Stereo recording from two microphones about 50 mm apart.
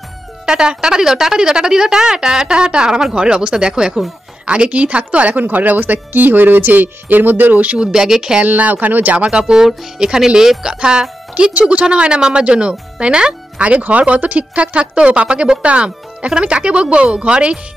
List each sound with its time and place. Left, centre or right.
0.5 s a woman's voice: centre
4.6 s speech: right
7.8 s a woman's voice: centre
8.5 s a woman's voice: right